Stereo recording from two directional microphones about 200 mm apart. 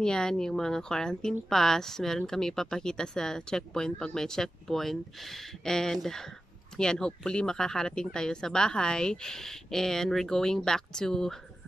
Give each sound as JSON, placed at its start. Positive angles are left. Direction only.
{"t": 0.0, "sound": "a woman's voice", "side_deg": 5}